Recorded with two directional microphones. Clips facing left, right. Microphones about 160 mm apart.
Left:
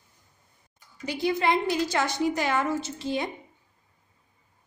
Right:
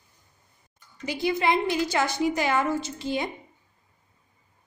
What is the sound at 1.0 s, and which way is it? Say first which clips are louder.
A woman's voice: even; 5° right (ahead or behind).